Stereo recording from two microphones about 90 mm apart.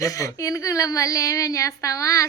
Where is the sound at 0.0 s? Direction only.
40° left (ahead or behind).